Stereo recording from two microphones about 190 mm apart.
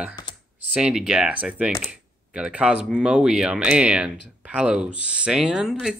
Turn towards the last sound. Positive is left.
turn(degrees=0)  # may be behind; listen again after turning